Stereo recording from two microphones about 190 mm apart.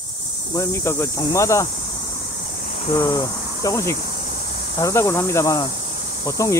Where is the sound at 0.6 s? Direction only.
15° left (ahead or behind).